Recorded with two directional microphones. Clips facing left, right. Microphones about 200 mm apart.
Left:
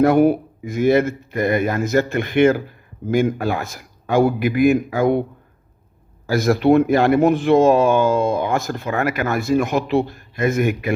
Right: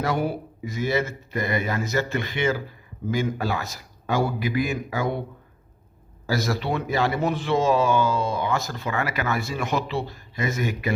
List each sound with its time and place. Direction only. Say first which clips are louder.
0.0 s a man's voice: left 11 dB; 55° left (ahead or behind)
6.2 s a man's voice: left 10 dB; 55° left (ahead or behind)